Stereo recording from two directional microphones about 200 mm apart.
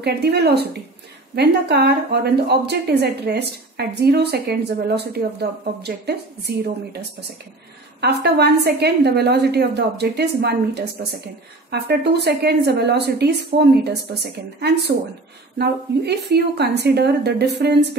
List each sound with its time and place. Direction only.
0.0 s a woman's voice: 55° right (ahead or behind)